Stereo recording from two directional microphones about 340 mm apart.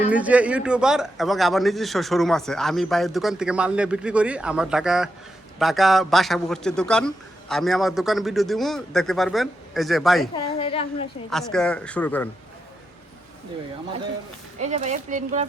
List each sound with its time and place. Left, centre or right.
0.1 s a man's voice: centre
10.3 s a woman's voice: centre
11.3 s a man's voice: centre
14.6 s speech: right